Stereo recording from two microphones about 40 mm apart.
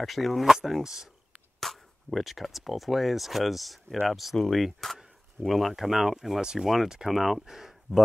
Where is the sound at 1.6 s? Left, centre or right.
Centre.